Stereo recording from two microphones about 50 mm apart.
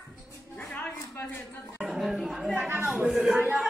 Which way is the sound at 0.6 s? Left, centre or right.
Left.